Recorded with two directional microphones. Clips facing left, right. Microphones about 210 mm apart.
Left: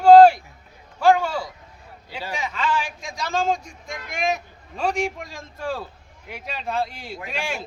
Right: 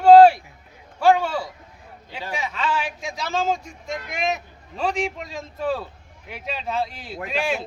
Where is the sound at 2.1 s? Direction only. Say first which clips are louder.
Left 1 dB; 10° left (ahead or behind).